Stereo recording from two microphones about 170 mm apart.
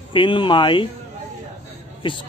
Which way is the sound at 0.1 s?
30° left (ahead or behind).